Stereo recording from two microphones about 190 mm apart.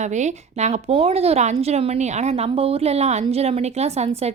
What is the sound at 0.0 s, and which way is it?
A woman's voice, 40° right (ahead or behind).